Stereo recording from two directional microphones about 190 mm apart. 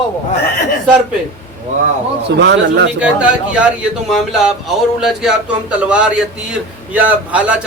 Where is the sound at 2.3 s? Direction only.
65° right (ahead or behind).